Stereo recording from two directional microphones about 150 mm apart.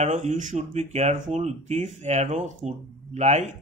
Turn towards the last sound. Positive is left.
turn(degrees=-50)  # may be behind; listen again after turning